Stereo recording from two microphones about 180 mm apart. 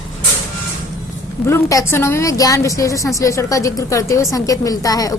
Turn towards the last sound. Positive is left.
turn(degrees=20)  # may be behind; listen again after turning